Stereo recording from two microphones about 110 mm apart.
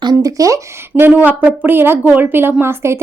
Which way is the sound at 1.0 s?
15° right (ahead or behind).